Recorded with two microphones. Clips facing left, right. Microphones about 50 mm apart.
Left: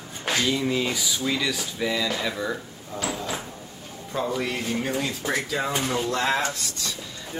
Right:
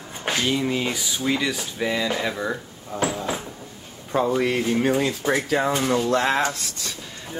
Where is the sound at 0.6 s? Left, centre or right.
Centre.